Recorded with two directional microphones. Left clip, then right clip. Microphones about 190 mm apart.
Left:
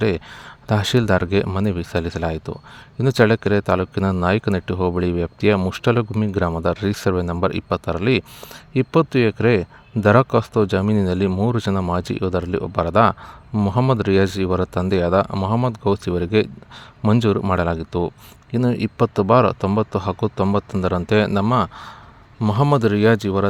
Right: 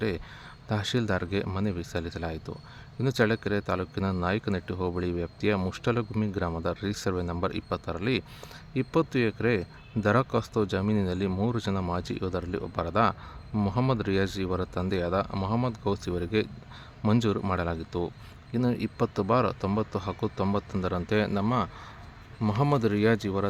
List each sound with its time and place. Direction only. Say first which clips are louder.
0.0 s speech: left 10 dB; 45° left (ahead or behind)